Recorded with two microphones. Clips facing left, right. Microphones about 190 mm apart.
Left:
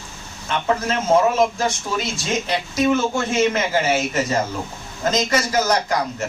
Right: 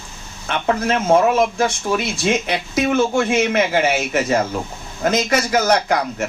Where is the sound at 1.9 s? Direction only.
65° right (ahead or behind).